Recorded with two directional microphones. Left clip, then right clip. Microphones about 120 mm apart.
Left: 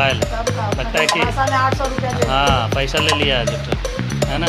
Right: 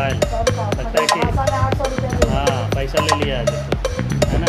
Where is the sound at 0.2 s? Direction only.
Centre (ahead or behind).